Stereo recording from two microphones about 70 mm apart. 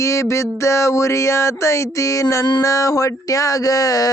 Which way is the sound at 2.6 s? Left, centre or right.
Left.